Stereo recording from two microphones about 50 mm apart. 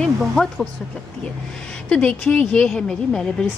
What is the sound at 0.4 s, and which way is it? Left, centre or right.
Speech, left.